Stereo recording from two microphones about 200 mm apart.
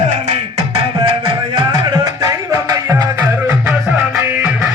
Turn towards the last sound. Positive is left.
turn(degrees=-15)  # may be behind; listen again after turning